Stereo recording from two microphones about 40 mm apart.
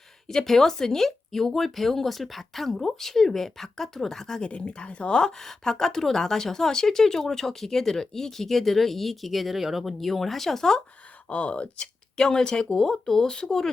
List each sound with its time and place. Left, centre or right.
0.3 s a woman's voice: centre
4.4 s speech: left
5.2 s a woman's voice: centre
11.3 s speech: left
12.1 s a woman's voice: centre